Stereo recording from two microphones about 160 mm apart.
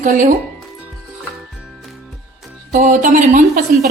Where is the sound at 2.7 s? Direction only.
55° right (ahead or behind).